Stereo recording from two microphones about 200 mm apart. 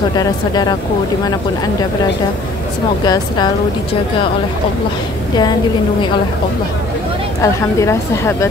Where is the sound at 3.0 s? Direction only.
20° left (ahead or behind).